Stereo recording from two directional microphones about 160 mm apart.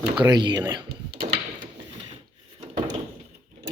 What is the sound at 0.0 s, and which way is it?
Speech, 30° right (ahead or behind).